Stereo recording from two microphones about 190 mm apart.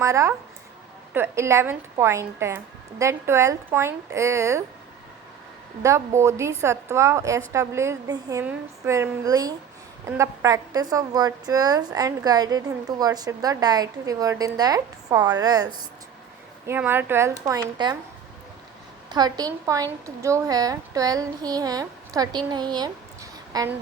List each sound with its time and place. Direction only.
0.0 s a woman's voice: 15° right (ahead or behind)
5.8 s a woman's voice: 15° right (ahead or behind)
19.0 s a woman's voice: 20° right (ahead or behind)